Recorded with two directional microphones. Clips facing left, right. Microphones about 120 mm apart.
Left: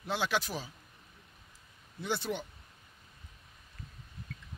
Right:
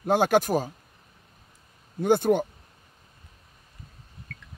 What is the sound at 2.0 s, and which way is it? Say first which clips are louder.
Speech: right 14 dB; 50° right (ahead or behind).